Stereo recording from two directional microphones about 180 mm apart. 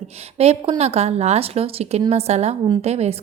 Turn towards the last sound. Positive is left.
turn(degrees=-35)  # may be behind; listen again after turning